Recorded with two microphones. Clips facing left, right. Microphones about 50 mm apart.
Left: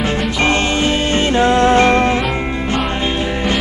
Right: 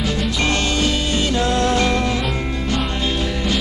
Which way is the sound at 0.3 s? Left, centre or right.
Left.